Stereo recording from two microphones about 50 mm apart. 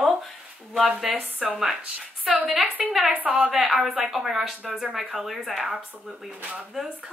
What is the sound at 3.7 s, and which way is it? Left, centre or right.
Speech, centre.